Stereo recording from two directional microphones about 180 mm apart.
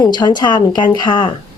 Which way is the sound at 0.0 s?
25° left (ahead or behind).